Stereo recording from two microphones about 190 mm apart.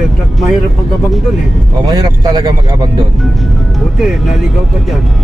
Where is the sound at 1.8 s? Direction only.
20° right (ahead or behind).